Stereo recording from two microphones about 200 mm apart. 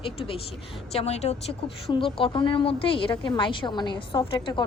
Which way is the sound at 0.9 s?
30° left (ahead or behind).